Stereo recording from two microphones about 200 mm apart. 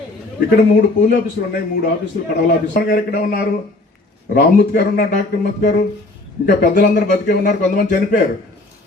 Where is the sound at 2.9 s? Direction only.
50° left (ahead or behind).